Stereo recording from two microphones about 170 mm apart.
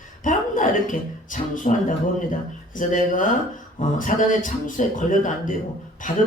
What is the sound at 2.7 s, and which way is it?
A man's voice, 50° left (ahead or behind).